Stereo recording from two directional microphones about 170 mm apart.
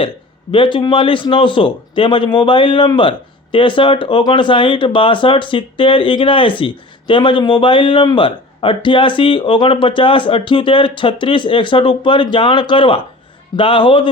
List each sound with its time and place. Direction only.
0.5 s a man's voice: 30° left (ahead or behind)